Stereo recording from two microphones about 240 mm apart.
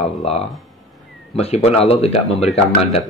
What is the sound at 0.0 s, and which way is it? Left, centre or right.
Speech, left.